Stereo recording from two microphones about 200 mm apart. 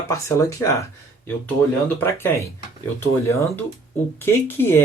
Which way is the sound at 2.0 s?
10° left (ahead or behind).